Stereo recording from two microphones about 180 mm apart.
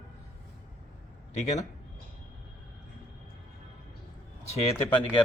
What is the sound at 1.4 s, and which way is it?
Speech, 40° left (ahead or behind).